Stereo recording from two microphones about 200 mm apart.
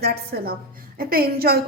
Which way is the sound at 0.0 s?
50° right (ahead or behind).